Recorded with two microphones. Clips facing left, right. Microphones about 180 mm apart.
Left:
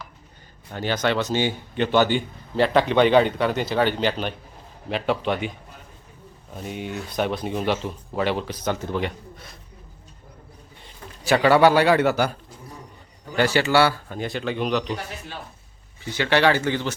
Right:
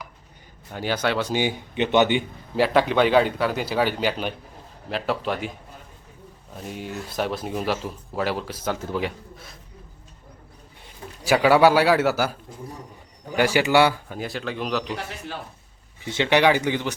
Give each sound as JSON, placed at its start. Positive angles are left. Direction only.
{"t": 0.7, "sound": "a man's voice", "side_deg": -10}
{"t": 6.6, "sound": "speech", "side_deg": 0}
{"t": 10.8, "sound": "a man's voice", "side_deg": -10}
{"t": 14.2, "sound": "speech", "side_deg": 0}
{"t": 16.0, "sound": "a man's voice", "side_deg": -20}